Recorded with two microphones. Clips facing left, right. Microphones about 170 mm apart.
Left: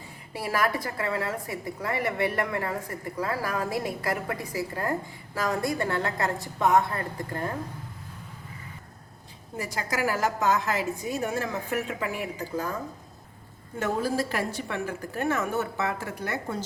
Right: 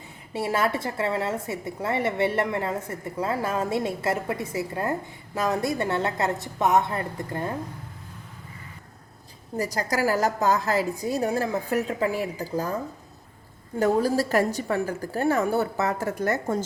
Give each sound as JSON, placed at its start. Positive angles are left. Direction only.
{"t": 0.3, "sound": "a woman's voice", "side_deg": -25}
{"t": 9.6, "sound": "a woman's voice", "side_deg": -40}
{"t": 13.7, "sound": "a woman's voice", "side_deg": -40}